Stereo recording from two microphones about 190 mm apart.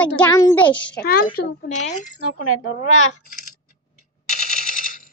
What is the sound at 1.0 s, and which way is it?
A woman's voice, 55° left (ahead or behind).